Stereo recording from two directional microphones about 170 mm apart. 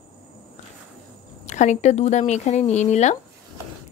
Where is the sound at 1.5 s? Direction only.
45° left (ahead or behind).